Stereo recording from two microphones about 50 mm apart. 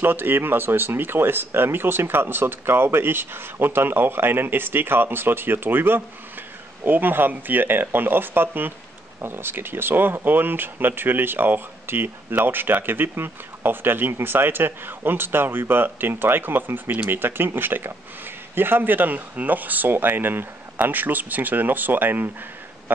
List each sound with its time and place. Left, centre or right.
0.0 s speech: right